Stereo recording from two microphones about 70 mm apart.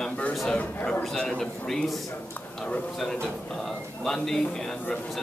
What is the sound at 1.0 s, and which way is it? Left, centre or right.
A man's voice, centre.